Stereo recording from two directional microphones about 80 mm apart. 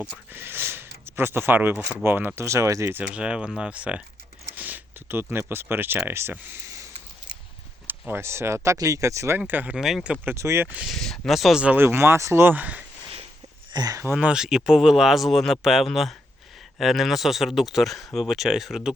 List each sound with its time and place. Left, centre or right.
0.3 s speech: right
3.0 s speech: centre; by 6.3 s right
7.9 s speech: right
9.5 s speech: right
9.7 s speech: centre
10.2 s speech: right
10.8 s speech: centre
11.6 s speech: right
13.7 s speech: right
14.2 s speech: centre